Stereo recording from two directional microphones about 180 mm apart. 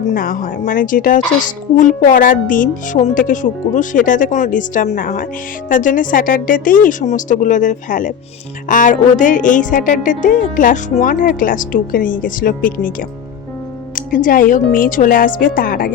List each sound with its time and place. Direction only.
0.1 s a woman's voice: 50° left (ahead or behind)